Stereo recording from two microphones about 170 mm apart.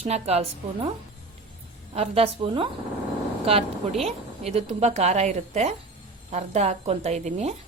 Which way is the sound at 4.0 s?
35° right (ahead or behind).